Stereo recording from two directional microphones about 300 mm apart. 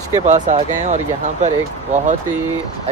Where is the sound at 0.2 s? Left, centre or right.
Right.